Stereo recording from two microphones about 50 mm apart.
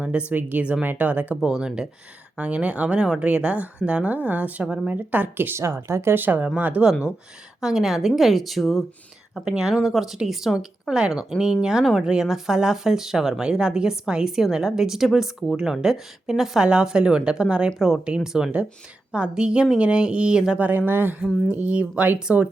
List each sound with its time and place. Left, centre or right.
0.3 s speech: right
1.4 s speech: centre
2.3 s speech: right
5.5 s speech: right
6.1 s speech: right
7.6 s a woman's voice: centre
9.4 s speech: centre
9.6 s a woman's voice: centre; by 20.4 s right
20.6 s speech: right
21.5 s speech: right